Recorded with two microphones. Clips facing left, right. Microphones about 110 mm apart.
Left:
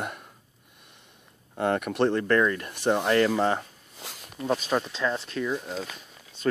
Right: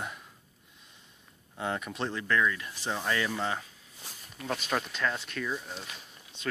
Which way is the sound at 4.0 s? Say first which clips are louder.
Left 7 dB; 90° left.